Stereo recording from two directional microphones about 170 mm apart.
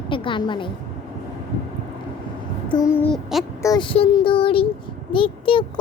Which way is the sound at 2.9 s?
10° left (ahead or behind).